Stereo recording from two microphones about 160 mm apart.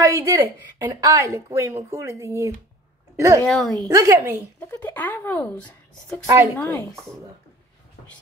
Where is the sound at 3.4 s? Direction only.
Centre (ahead or behind).